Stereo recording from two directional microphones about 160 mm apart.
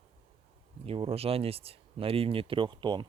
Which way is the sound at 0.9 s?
40° right (ahead or behind).